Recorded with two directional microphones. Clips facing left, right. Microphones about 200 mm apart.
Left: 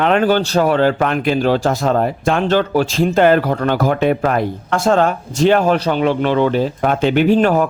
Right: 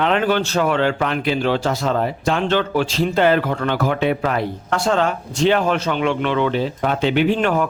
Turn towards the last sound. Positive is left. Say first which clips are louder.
# left 5 dB
turn(degrees=40)  # may be behind; listen again after turning